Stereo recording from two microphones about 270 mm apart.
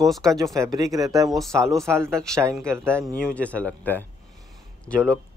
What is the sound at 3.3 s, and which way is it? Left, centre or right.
Speech, centre.